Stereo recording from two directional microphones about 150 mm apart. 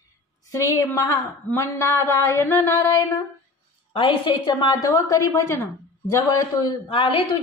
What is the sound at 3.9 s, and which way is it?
A woman's voice, 35° left (ahead or behind).